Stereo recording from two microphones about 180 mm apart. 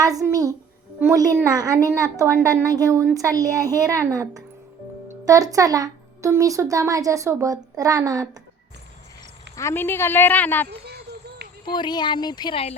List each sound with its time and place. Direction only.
0.0 s a woman's voice: 20° right (ahead or behind)
9.6 s speech: 15° left (ahead or behind)
10.7 s a sound: 65° right (ahead or behind)
11.6 s speech: 25° left (ahead or behind)